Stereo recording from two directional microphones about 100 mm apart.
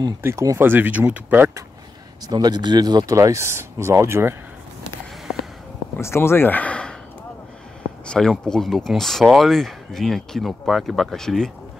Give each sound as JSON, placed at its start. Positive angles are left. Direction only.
{"t": 0.2, "sound": "speech", "side_deg": -30}
{"t": 0.7, "sound": "speech", "side_deg": -20}
{"t": 2.2, "sound": "speech", "side_deg": -45}
{"t": 3.2, "sound": "speech", "side_deg": -30}
{"t": 5.9, "sound": "speech", "side_deg": 25}
{"t": 8.1, "sound": "speech", "side_deg": 5}